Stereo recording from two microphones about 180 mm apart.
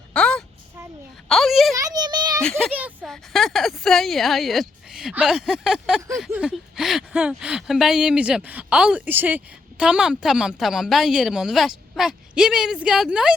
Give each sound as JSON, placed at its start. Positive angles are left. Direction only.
{"t": 0.1, "sound": "a sound", "side_deg": 5}
{"t": 1.3, "sound": "speech", "side_deg": 0}
{"t": 1.7, "sound": "a child's voice", "side_deg": -20}
{"t": 2.4, "sound": "speech", "side_deg": 5}
{"t": 2.7, "sound": "speech", "side_deg": -10}